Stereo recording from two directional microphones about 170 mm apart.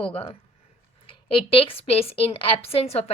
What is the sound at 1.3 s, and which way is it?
A woman's voice, 30° left (ahead or behind).